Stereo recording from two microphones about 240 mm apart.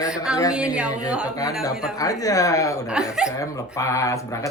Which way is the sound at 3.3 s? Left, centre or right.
Centre.